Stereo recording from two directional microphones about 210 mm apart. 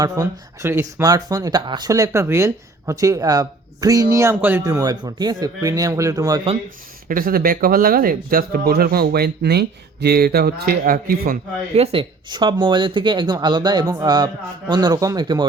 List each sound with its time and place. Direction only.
0.0 s speech: 15° right (ahead or behind)
7.1 s speech: 45° right (ahead or behind)
11.7 s speech: 30° right (ahead or behind)